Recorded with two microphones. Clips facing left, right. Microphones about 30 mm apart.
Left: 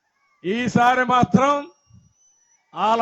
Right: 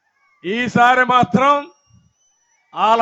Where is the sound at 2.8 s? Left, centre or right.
Right.